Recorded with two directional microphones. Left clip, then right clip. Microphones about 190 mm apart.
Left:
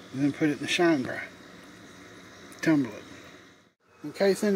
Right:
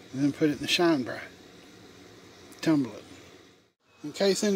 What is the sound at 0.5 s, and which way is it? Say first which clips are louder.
Speech: right 1 dB; 85° right.